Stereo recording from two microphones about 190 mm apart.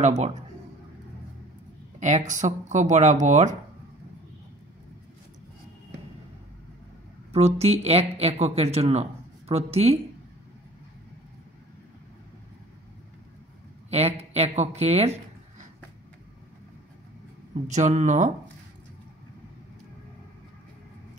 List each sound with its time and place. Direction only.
0.0 s speech: 35° right (ahead or behind)
2.0 s speech: 40° right (ahead or behind)
7.3 s speech: 35° right (ahead or behind)
13.8 s speech: 35° right (ahead or behind)
17.6 s speech: 40° right (ahead or behind)